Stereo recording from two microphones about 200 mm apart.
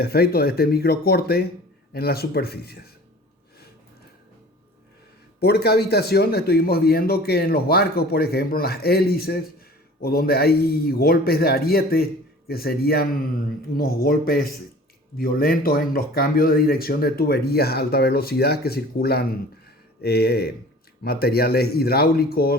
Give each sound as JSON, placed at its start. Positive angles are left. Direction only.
{"t": 0.0, "sound": "speech", "side_deg": 50}
{"t": 5.4, "sound": "speech", "side_deg": 55}